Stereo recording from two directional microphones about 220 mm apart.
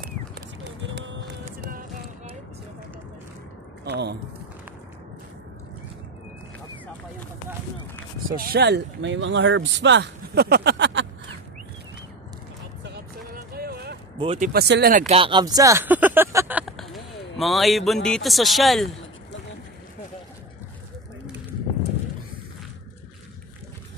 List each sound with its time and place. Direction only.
0.8 s music: 55° right (ahead or behind)
1.4 s music: 40° right (ahead or behind)
3.8 s speech: 50° right (ahead or behind)
8.4 s speech: 45° right (ahead or behind)
12.8 s vehicle: 45° right (ahead or behind)
14.1 s speech: 25° right (ahead or behind)
14.5 s speech: 45° right (ahead or behind)
15.1 s speech: 20° right (ahead or behind); by 18.9 s centre (ahead or behind)